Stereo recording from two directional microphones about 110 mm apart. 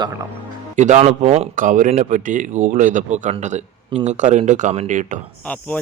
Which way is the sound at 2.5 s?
90° right.